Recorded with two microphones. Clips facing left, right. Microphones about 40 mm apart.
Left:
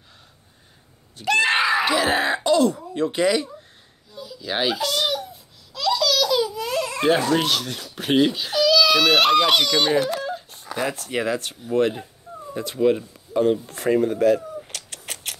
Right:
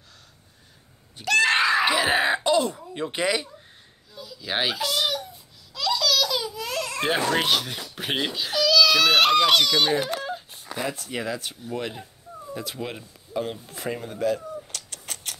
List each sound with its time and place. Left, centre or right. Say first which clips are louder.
1.2 s screaming: left 1 dB; left
1.9 s wail: left 1 dB; centre
2.9 s speech: left 5 dB; centre
4.1 s a sound: left 4 dB; centre
4.4 s babbling: left 3 dB; centre
7.2 s speech: left 2 dB; right
7.5 s speech: even; centre
10.2 s a sound: left 3 dB; centre
11.1 s speech: left 6 dB; left
11.3 s speech: left 9 dB; centre
13.9 s speech: left 9 dB; centre
14.7 s cat: left 3 dB; centre